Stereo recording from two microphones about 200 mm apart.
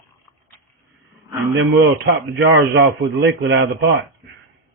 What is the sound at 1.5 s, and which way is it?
Speech, 60° right (ahead or behind).